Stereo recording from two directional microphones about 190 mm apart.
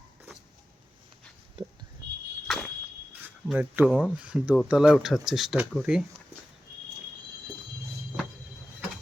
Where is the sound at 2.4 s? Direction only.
Centre (ahead or behind).